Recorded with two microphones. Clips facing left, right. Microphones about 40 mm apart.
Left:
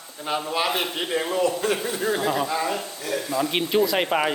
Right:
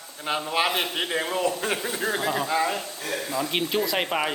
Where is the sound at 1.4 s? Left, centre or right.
Right.